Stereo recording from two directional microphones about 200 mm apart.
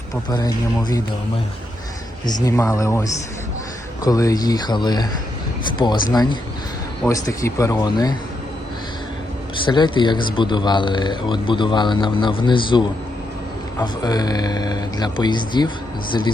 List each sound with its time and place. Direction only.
0.3 s a man's voice: 20° left (ahead or behind)
2.2 s a man's voice: 20° left (ahead or behind)
9.6 s a man's voice: 20° left (ahead or behind)
13.8 s a man's voice: 20° left (ahead or behind)